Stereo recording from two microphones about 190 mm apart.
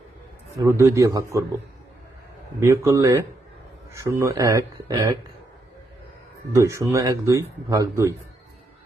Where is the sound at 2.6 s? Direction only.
15° right (ahead or behind).